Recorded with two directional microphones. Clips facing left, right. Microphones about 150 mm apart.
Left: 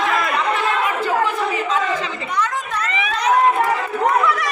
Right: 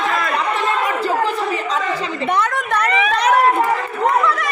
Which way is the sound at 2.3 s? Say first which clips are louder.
Right 5 dB; 65° right (ahead or behind).